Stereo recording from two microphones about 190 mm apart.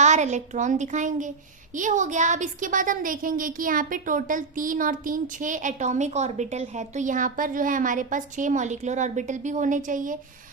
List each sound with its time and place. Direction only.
0.0 s a woman's voice: 40° right (ahead or behind)